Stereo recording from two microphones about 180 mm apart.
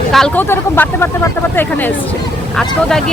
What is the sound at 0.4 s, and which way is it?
Speech, 10° left (ahead or behind).